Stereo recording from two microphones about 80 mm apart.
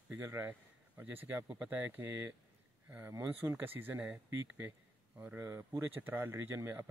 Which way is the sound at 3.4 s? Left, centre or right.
Right.